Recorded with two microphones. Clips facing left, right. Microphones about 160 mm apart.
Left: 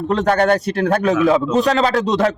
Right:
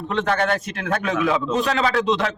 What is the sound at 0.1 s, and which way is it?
A man's voice, 40° left (ahead or behind).